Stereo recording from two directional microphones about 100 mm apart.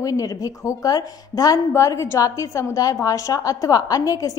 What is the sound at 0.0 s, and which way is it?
A woman's voice, 35° left (ahead or behind).